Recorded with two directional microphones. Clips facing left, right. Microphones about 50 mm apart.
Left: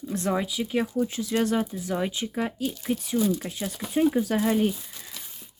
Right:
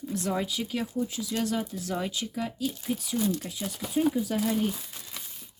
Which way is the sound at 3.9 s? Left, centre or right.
Left.